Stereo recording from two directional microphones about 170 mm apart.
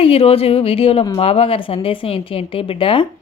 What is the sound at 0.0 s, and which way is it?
A woman's voice, 35° left (ahead or behind).